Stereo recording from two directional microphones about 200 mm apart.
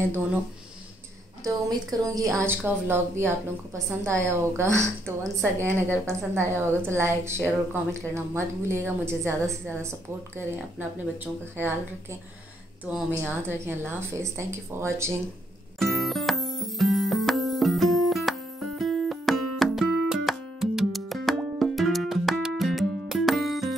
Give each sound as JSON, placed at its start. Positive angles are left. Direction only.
{"t": 1.4, "sound": "a woman's voice", "side_deg": -20}
{"t": 6.7, "sound": "a woman's voice", "side_deg": 5}
{"t": 7.0, "sound": "speech", "side_deg": -15}
{"t": 15.8, "sound": "music", "side_deg": 0}